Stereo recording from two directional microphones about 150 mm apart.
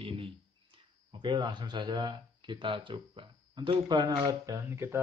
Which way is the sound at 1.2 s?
30° right (ahead or behind).